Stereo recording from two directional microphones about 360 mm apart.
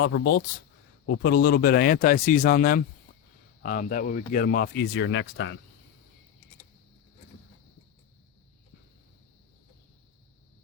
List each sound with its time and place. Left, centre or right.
0.0 s speech: left